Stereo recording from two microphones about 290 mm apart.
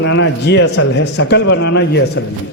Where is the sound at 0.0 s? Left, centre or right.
Left.